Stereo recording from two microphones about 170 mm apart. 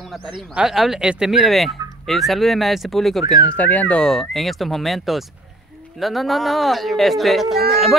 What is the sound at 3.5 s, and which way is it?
A man's voice, 10° left (ahead or behind).